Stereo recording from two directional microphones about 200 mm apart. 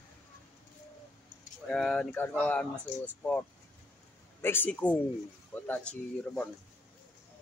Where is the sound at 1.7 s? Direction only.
Centre (ahead or behind).